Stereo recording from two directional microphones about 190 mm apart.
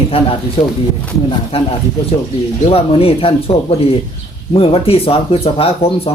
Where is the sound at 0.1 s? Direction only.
30° left (ahead or behind).